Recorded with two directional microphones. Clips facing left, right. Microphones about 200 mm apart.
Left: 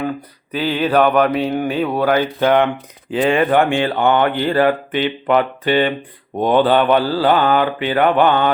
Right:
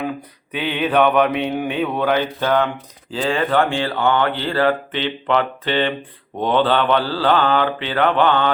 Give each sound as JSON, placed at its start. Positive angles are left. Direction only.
{"t": 0.5, "sound": "speech", "side_deg": 0}